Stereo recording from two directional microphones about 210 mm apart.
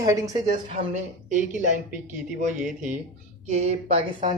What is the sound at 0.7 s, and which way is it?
Speech, 30° right (ahead or behind).